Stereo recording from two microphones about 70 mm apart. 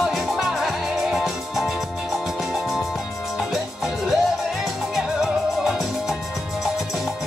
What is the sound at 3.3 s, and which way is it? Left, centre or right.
Music, centre.